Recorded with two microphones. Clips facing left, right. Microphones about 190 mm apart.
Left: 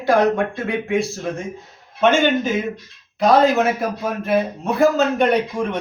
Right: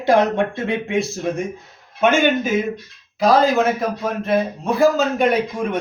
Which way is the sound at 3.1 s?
Centre (ahead or behind).